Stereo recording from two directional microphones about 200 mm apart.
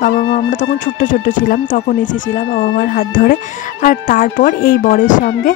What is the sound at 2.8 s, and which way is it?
Speech, 45° left (ahead or behind).